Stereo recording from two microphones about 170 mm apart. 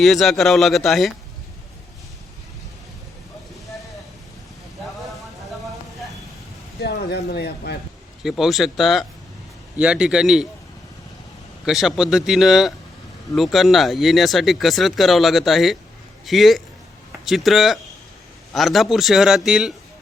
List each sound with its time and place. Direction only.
0.0 s speech: centre (ahead or behind)
6.8 s a sound: 80° left
8.2 s speech: centre (ahead or behind)
11.6 s speech: centre (ahead or behind)